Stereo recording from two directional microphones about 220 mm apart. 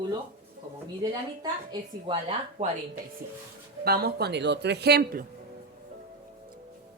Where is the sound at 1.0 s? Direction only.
20° right (ahead or behind).